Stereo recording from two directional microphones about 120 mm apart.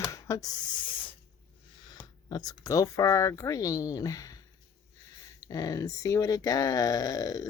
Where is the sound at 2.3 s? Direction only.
30° left (ahead or behind).